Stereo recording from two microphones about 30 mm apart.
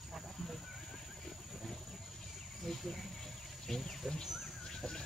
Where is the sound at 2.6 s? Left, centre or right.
Centre.